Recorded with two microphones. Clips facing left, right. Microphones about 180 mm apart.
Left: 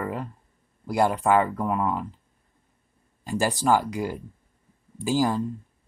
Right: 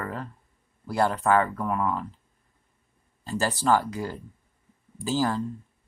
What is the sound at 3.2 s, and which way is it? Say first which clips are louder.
Speech: left 1 dB; 15° left (ahead or behind).